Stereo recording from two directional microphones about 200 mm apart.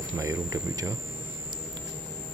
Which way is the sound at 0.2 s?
15° right (ahead or behind).